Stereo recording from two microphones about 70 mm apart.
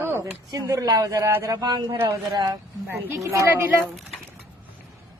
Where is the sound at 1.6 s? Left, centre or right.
Right.